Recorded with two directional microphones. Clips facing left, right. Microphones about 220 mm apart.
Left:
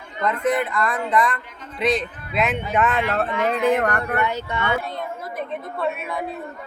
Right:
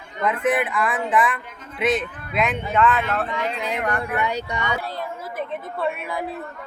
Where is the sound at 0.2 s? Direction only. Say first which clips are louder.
Even; 5° right (ahead or behind).